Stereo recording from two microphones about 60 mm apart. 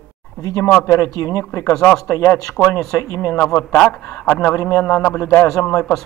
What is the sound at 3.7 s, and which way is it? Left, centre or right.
Speech, centre.